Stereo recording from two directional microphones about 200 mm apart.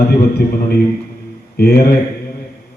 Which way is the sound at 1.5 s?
50° left (ahead or behind).